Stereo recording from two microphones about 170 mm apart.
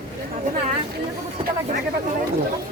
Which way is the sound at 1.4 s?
35° right (ahead or behind).